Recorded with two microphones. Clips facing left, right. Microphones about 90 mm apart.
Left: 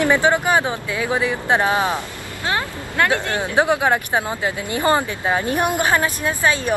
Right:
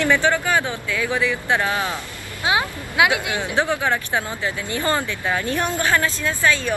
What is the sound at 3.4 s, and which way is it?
Speech, 15° left (ahead or behind).